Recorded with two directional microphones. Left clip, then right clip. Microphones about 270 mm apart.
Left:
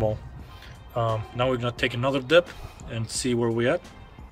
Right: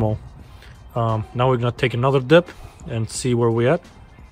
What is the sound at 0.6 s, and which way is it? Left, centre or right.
Speech, centre.